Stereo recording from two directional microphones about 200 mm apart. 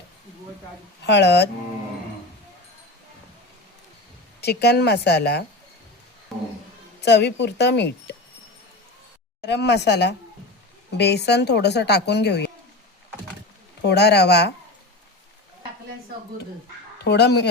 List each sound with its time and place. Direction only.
1.0 s a woman's voice: 60° left (ahead or behind)
4.4 s a woman's voice: 55° left (ahead or behind)
6.3 s a sound: centre (ahead or behind)
7.0 s a woman's voice: 60° left (ahead or behind)
9.4 s a woman's voice: 55° left (ahead or behind)
13.8 s a woman's voice: 55° left (ahead or behind)
17.0 s a woman's voice: 55° left (ahead or behind)